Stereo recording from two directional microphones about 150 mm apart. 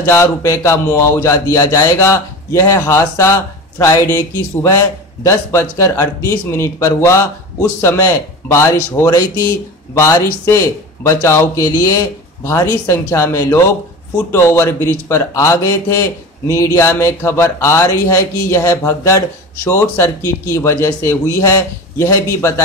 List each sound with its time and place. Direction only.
0.0 s a man's voice: 20° left (ahead or behind)